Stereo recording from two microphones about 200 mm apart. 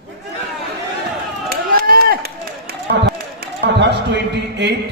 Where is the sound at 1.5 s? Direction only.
50° right (ahead or behind).